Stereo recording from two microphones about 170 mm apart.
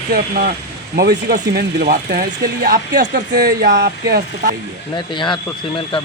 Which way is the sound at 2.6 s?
70° right (ahead or behind).